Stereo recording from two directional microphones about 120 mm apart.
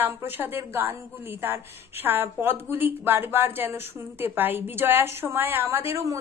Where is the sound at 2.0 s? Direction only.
20° right (ahead or behind).